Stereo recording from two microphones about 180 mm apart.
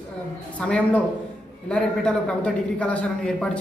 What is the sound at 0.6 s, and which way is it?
A man's voice, 5° left (ahead or behind).